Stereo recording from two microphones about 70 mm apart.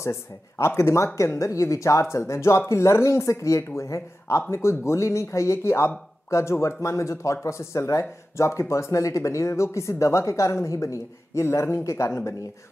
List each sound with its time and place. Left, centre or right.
0.0 s speech: left